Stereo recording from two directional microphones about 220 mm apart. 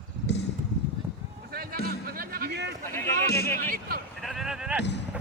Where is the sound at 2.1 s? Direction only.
40° right (ahead or behind).